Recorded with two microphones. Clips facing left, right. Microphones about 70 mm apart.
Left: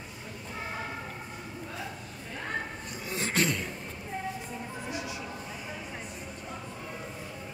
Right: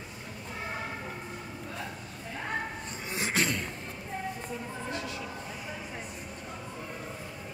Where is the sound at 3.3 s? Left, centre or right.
Centre.